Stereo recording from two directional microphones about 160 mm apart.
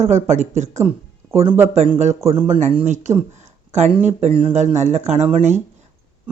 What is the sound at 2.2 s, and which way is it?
Speech, 35° right (ahead or behind).